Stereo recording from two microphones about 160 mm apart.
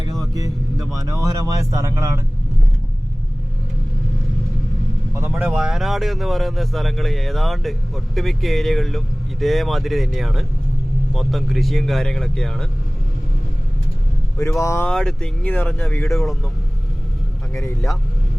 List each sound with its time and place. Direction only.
1.1 s speech: 20° right (ahead or behind)
5.3 s speech: 5° right (ahead or behind)
14.6 s speech: 20° left (ahead or behind)
14.8 s speech: 5° left (ahead or behind)
16.1 s speech: centre (ahead or behind)
17.5 s speech: 20° left (ahead or behind)